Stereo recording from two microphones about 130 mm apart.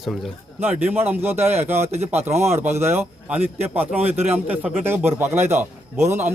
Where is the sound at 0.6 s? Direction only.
15° right (ahead or behind).